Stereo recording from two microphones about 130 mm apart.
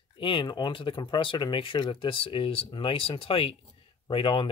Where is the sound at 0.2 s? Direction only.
40° left (ahead or behind).